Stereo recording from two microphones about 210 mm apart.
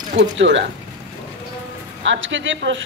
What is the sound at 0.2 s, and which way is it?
Speech, 60° right (ahead or behind).